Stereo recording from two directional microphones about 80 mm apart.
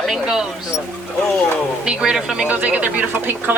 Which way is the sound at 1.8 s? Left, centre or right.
Centre.